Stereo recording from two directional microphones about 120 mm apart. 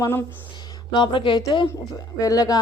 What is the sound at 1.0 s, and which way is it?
Speech, 45° left (ahead or behind).